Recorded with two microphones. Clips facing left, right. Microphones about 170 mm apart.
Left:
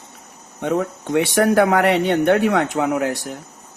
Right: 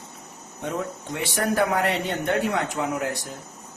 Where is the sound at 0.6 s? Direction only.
70° left (ahead or behind).